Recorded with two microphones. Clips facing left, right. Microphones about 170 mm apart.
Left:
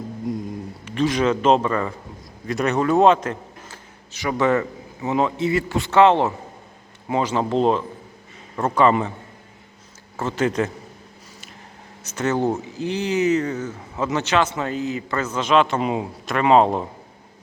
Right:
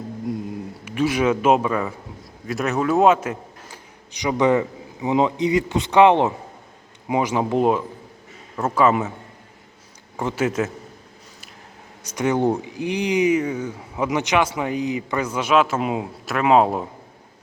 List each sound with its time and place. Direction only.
0.9 s a man's voice: 10° right (ahead or behind)
10.2 s speech: 10° right (ahead or behind)
12.0 s speech: 15° right (ahead or behind)